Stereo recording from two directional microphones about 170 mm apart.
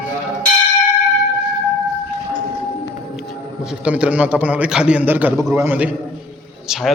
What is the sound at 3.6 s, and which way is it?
A man's voice, 5° right (ahead or behind).